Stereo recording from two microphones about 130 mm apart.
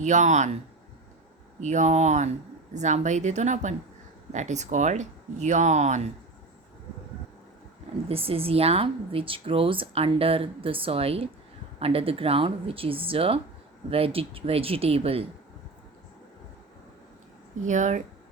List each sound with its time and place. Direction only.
0.0 s speech: 65° right (ahead or behind)
1.6 s speech: 65° right (ahead or behind)
8.0 s speech: 50° right (ahead or behind)
17.7 s speech: 70° right (ahead or behind)